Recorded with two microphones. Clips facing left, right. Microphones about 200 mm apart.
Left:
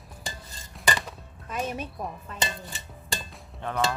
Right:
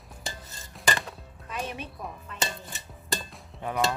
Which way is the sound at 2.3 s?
40° left (ahead or behind).